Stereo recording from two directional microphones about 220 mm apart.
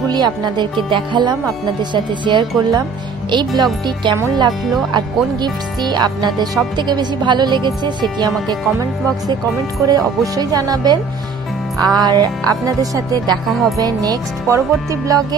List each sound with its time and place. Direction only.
0.1 s speech: 20° right (ahead or behind)
9.8 s speech: 15° right (ahead or behind)